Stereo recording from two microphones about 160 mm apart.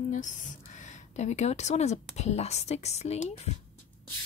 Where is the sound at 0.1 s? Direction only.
50° left (ahead or behind).